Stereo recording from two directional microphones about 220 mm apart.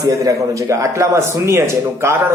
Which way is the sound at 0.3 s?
15° right (ahead or behind).